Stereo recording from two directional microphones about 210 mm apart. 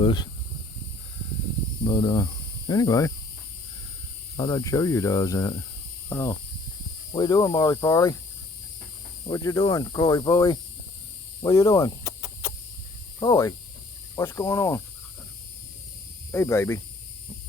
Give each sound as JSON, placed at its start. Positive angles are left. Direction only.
{"t": 0.0, "sound": "speech", "side_deg": 20}
{"t": 1.8, "sound": "speech", "side_deg": 20}
{"t": 4.4, "sound": "speech", "side_deg": 15}
{"t": 9.3, "sound": "speech", "side_deg": 20}
{"t": 11.4, "sound": "snake", "side_deg": 15}
{"t": 13.1, "sound": "speech", "side_deg": 20}
{"t": 16.3, "sound": "speech", "side_deg": 15}